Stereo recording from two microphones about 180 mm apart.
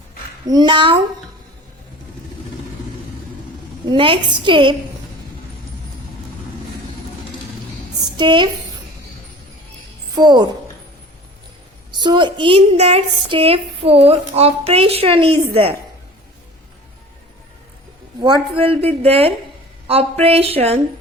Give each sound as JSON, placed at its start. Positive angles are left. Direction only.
{"t": 0.4, "sound": "a woman's voice", "side_deg": -25}
{"t": 3.8, "sound": "a woman's voice", "side_deg": -30}
{"t": 8.1, "sound": "a woman's voice", "side_deg": -25}
{"t": 10.2, "sound": "a woman's voice", "side_deg": -25}
{"t": 11.9, "sound": "a woman's voice", "side_deg": -25}
{"t": 18.2, "sound": "a woman's voice", "side_deg": -30}